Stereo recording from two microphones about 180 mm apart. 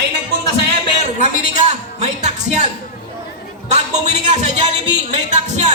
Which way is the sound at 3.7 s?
40° right (ahead or behind).